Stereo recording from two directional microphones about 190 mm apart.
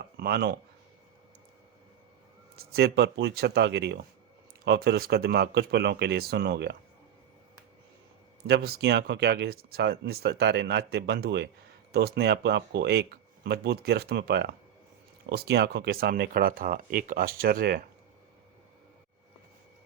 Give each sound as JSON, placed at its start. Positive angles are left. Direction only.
{"t": 0.2, "sound": "speech", "side_deg": -55}
{"t": 2.6, "sound": "speech", "side_deg": -60}
{"t": 8.4, "sound": "speech", "side_deg": -60}